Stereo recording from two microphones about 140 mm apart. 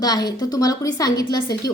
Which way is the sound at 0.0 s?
30° left (ahead or behind).